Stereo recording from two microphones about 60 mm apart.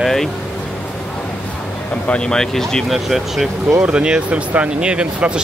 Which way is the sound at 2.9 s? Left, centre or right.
Centre.